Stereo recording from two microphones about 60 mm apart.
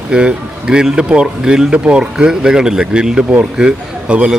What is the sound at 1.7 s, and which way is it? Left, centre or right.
Speech, right.